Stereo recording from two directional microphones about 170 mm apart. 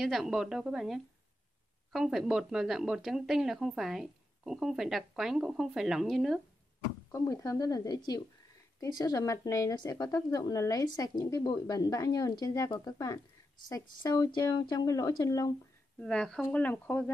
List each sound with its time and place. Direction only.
0.0 s speech: centre (ahead or behind)
7.1 s speech: 20° left (ahead or behind)
16.0 s speech: 5° left (ahead or behind)